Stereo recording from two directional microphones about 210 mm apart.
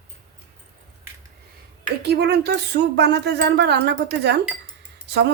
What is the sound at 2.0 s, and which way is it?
Speech, 50° right (ahead or behind).